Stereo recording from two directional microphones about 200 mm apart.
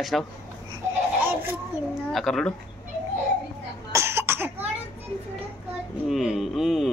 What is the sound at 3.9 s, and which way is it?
Cough, 10° right (ahead or behind).